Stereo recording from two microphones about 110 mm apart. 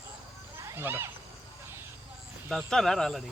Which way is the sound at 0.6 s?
20° right (ahead or behind).